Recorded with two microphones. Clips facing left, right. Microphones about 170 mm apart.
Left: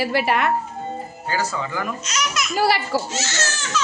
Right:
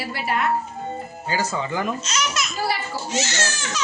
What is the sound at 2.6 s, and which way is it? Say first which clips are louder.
Speech: left 8 dB; 80° left.